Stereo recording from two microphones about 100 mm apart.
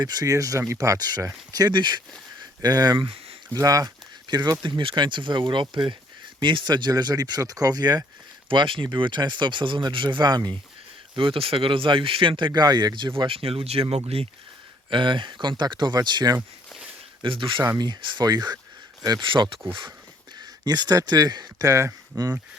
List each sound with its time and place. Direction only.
0.0 s speech: 40° right (ahead or behind)
4.6 s speech: 55° right (ahead or behind); by 8.0 s 40° right (ahead or behind)
8.4 s speech: 60° right (ahead or behind)
11.1 s speech: 60° right (ahead or behind); by 14.3 s 80° right
14.8 s speech: 55° right (ahead or behind)
17.2 s speech: 55° right (ahead or behind)
17.7 s speech: 45° right (ahead or behind)
20.4 s speech: 45° right (ahead or behind)